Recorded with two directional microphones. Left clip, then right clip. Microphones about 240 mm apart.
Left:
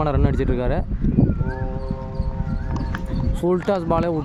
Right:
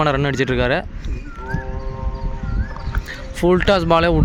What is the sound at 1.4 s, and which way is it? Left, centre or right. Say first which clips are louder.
Clip-clop: right 2 dB; left.